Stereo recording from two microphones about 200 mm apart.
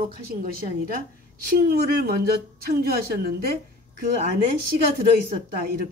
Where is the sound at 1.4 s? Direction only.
45° right (ahead or behind).